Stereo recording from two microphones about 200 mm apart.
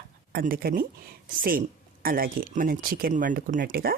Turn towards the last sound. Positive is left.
turn(degrees=-50)  # may be behind; listen again after turning